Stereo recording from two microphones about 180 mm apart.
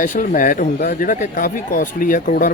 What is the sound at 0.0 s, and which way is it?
Speech, 50° left (ahead or behind).